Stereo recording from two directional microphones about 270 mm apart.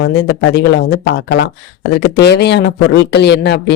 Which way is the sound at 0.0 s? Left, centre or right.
Left.